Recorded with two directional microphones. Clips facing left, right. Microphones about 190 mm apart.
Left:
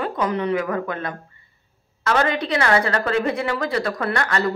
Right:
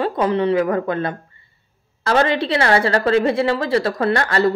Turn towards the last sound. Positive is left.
turn(degrees=-30)  # may be behind; listen again after turning